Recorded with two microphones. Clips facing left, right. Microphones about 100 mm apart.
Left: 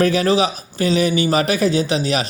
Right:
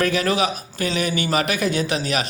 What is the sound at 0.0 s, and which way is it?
Speech, 35° left (ahead or behind).